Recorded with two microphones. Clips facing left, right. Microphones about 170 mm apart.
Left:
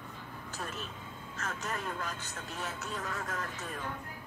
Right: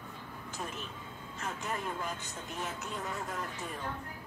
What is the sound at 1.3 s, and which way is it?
Speech, 15° right (ahead or behind).